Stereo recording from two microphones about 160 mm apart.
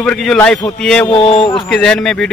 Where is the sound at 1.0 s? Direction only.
35° left (ahead or behind).